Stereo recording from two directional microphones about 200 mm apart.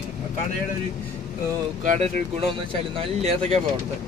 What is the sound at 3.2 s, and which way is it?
Speech, 35° right (ahead or behind).